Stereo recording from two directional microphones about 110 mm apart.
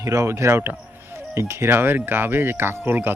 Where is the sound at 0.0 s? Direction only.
30° right (ahead or behind).